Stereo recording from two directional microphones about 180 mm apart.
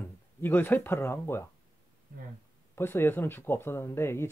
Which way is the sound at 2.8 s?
10° left (ahead or behind).